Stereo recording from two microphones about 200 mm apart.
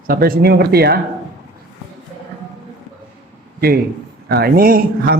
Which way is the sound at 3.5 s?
50° right (ahead or behind).